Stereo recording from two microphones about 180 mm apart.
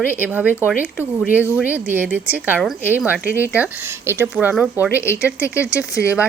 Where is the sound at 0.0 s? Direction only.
10° right (ahead or behind).